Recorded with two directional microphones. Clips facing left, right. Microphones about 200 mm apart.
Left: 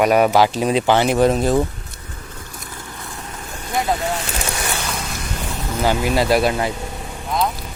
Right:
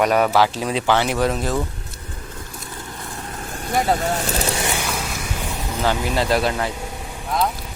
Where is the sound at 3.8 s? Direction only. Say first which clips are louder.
Right 1 dB; 45° right (ahead or behind).